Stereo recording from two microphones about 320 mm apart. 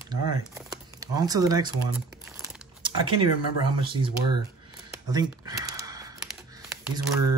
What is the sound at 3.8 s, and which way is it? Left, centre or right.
Speech, centre.